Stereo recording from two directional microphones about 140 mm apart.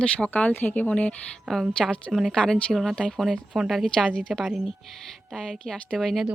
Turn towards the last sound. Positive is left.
turn(degrees=0)  # may be behind; listen again after turning